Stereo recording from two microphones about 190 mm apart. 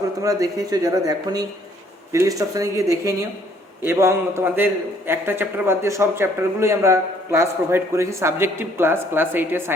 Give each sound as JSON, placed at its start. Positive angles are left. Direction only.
{"t": 0.2, "sound": "a man's voice", "side_deg": -15}